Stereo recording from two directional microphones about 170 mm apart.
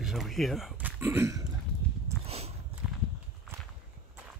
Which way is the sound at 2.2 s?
35° right (ahead or behind).